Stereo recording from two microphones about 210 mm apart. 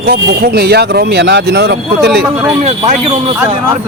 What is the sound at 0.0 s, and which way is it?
Speech, 50° right (ahead or behind).